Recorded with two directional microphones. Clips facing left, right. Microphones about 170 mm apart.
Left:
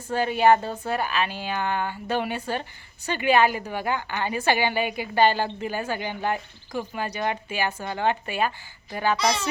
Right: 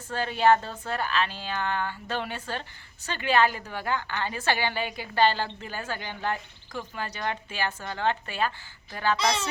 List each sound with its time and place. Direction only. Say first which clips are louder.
0.1 s a woman's voice: left 3 dB; 15° left (ahead or behind)